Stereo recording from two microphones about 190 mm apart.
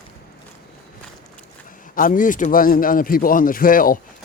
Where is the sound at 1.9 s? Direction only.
45° left (ahead or behind).